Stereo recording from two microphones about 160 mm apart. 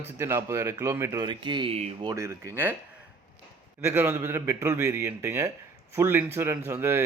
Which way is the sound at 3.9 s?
15° right (ahead or behind).